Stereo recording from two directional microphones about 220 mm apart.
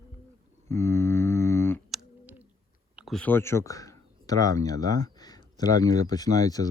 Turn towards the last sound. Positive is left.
turn(degrees=15)  # may be behind; listen again after turning